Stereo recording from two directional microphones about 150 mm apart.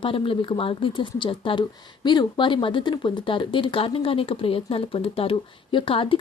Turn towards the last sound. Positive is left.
turn(degrees=35)  # may be behind; listen again after turning